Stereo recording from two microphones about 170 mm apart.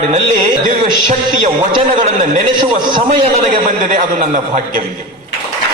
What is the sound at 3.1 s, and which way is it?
Speech, 50° right (ahead or behind).